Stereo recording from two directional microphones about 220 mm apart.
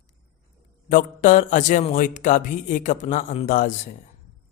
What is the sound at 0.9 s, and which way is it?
A man's voice, 35° left (ahead or behind).